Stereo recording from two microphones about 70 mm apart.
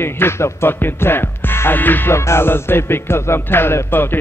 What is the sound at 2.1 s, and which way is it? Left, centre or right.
Speech, left.